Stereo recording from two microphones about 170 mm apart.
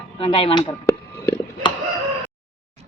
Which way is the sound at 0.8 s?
15° left (ahead or behind).